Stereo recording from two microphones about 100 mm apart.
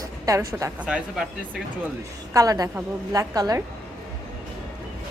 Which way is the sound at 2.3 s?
35° right (ahead or behind).